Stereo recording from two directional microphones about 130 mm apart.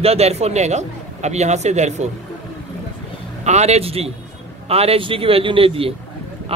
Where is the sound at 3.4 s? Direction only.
60° right (ahead or behind).